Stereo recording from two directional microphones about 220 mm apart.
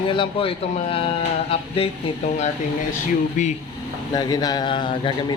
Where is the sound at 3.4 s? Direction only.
35° left (ahead or behind).